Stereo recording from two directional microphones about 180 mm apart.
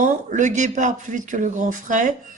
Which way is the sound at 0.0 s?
45° right (ahead or behind).